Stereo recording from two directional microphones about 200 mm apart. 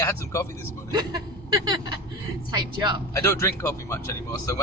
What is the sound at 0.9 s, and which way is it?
Speech, 20° right (ahead or behind).